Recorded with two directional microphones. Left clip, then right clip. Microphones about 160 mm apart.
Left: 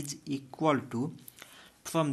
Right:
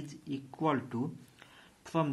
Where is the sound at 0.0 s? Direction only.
30° left (ahead or behind).